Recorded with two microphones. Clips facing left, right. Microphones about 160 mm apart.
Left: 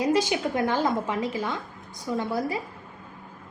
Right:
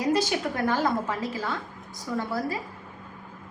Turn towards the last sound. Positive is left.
turn(degrees=20)  # may be behind; listen again after turning